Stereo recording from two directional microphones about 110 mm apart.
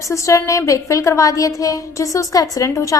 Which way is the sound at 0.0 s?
30° left (ahead or behind).